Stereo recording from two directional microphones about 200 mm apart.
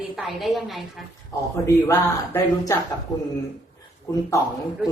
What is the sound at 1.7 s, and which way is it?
Speech, 10° left (ahead or behind).